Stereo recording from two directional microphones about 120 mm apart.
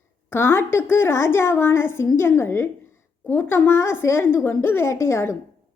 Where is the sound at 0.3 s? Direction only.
20° left (ahead or behind).